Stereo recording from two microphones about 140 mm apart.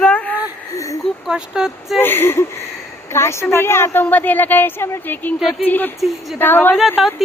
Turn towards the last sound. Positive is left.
turn(degrees=0)  # may be behind; listen again after turning